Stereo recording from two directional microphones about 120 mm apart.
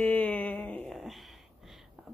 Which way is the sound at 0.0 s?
10° left (ahead or behind).